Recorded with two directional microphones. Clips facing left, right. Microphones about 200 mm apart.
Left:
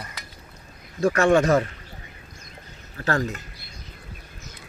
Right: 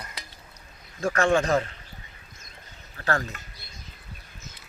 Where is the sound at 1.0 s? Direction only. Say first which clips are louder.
Left 4 dB; 40° left (ahead or behind).